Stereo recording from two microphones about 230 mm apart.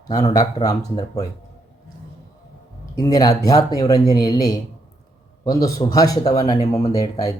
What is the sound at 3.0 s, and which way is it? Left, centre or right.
Speech, centre.